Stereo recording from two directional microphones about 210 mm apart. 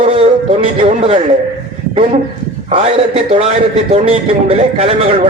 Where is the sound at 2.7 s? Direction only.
25° right (ahead or behind).